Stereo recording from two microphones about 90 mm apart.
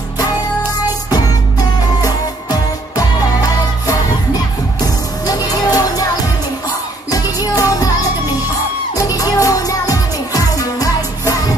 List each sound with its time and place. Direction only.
0.8 s music: 45° left (ahead or behind)
8.9 s music: 40° left (ahead or behind)